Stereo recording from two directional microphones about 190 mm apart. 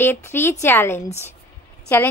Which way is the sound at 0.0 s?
10° left (ahead or behind).